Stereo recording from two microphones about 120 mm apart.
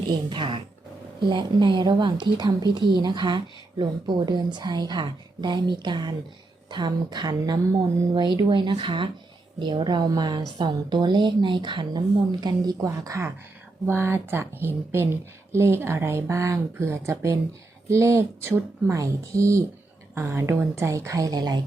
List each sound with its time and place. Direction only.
0.1 s a woman's voice: 40° right (ahead or behind)